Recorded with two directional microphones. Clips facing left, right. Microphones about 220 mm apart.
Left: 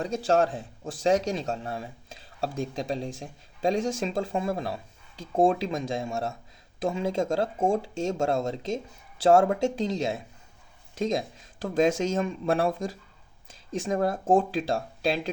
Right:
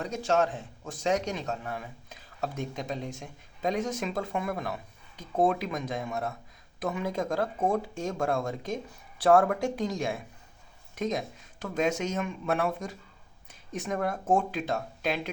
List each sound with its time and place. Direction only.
0.0 s speech: 30° left (ahead or behind)